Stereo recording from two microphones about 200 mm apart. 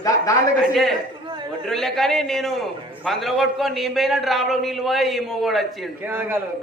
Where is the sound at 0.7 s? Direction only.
Centre (ahead or behind).